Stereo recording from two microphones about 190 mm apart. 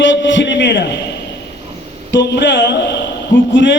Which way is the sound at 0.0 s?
75° left (ahead or behind).